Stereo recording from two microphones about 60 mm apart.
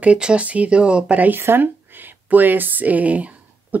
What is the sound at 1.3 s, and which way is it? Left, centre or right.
Speech, right.